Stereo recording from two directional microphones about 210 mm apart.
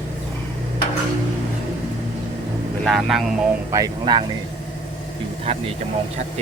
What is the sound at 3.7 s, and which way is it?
Speech, 20° right (ahead or behind).